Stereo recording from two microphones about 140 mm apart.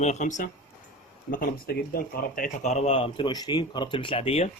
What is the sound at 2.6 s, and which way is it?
Speech, 55° left (ahead or behind).